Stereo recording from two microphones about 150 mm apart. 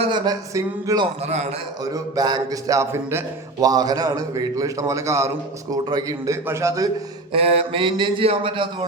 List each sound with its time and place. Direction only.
0.0 s a man's voice: 30° right (ahead or behind)
1.2 s a man's voice: 45° right (ahead or behind)
1.8 s a man's voice: 25° right (ahead or behind)
7.3 s a sound: 40° right (ahead or behind)